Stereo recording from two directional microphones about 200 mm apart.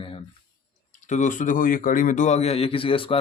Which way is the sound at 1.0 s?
40° left (ahead or behind).